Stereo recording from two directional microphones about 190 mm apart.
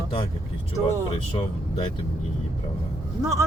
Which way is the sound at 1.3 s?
25° left (ahead or behind).